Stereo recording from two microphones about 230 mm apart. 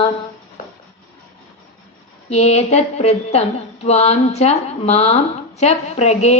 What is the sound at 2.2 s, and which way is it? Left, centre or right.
Speech, left.